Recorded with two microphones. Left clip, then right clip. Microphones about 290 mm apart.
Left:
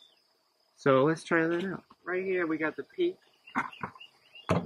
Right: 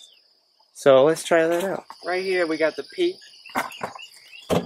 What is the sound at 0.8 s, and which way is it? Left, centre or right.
Speech, centre.